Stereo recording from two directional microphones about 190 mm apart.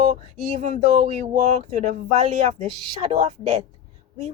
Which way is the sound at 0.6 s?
40° right (ahead or behind).